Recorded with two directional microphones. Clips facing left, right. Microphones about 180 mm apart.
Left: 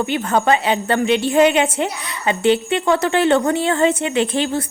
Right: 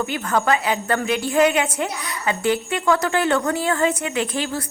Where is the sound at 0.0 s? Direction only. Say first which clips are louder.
Left 4 dB; 25° left (ahead or behind).